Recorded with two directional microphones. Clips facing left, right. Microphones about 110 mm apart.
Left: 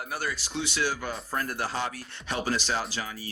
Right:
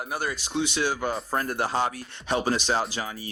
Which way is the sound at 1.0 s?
40° right (ahead or behind).